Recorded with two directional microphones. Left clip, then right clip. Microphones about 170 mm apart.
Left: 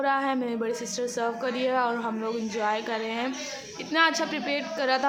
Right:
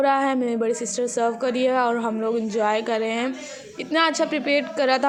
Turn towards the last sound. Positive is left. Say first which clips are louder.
# right 6 dB
turn(degrees=-30)  # may be behind; listen again after turning